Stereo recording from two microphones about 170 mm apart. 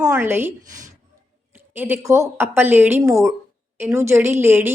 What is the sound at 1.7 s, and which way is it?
A woman's voice, 10° right (ahead or behind).